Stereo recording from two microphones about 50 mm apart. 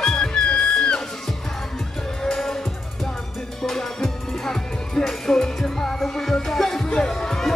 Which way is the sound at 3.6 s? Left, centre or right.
Centre.